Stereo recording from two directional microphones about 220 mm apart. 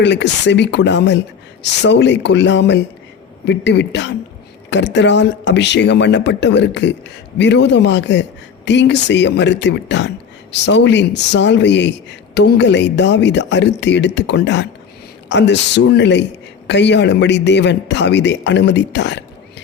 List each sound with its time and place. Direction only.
0.0 s speech: 55° left (ahead or behind)